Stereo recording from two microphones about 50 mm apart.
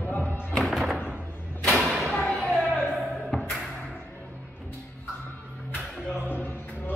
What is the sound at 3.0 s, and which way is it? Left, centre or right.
Music, centre.